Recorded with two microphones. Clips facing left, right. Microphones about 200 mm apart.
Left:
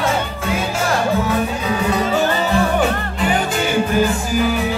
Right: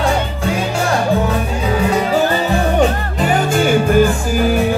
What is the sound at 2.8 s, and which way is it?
Music, 40° right (ahead or behind).